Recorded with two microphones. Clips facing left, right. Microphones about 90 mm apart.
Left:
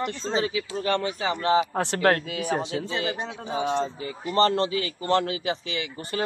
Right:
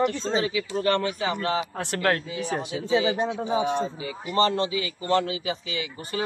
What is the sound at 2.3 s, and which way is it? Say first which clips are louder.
Speech: left 2 dB; 65° left (ahead or behind).